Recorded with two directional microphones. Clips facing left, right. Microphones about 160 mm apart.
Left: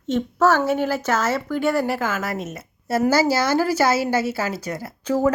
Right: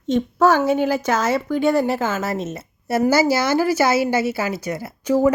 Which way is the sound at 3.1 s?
10° right (ahead or behind).